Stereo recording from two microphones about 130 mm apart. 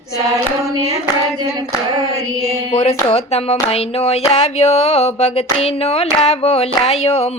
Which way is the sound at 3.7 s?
50° left (ahead or behind).